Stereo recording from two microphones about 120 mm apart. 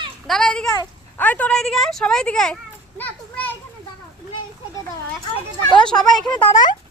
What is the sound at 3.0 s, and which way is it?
Children playing, 15° left (ahead or behind).